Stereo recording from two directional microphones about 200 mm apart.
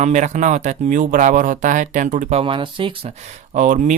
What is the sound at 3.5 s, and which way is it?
Speech, 40° right (ahead or behind).